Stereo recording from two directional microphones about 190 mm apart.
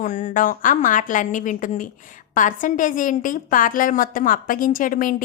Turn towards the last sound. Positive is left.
turn(degrees=45)  # may be behind; listen again after turning